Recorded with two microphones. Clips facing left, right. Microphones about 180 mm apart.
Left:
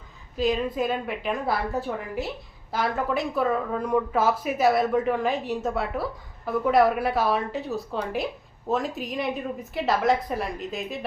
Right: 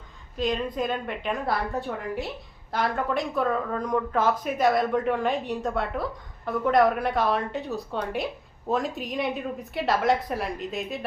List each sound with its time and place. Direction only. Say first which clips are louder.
0.3 s speech: left 2 dB; 5° left (ahead or behind)